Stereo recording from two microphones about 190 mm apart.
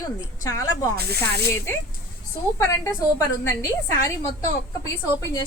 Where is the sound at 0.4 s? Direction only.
20° left (ahead or behind).